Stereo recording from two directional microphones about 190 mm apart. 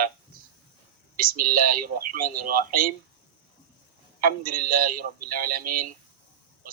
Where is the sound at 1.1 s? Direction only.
50° right (ahead or behind).